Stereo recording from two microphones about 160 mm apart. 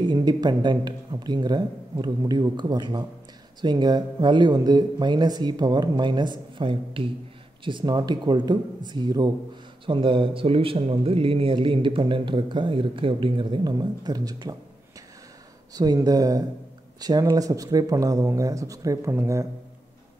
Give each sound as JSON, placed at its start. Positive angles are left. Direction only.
{"t": 0.0, "sound": "a man's voice", "side_deg": -25}
{"t": 15.7, "sound": "speech", "side_deg": -25}